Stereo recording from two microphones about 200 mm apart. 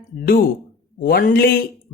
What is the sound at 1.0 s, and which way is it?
Speech, 45° left (ahead or behind).